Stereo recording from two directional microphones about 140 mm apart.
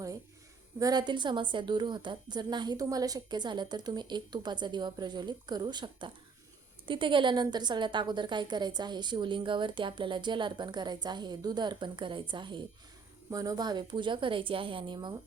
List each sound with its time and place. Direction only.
0.8 s a woman's voice: 30° right (ahead or behind)